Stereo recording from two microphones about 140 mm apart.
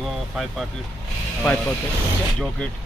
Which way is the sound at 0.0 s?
Centre (ahead or behind).